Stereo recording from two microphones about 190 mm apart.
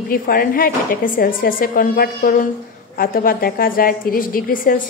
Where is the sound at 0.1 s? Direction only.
50° left (ahead or behind).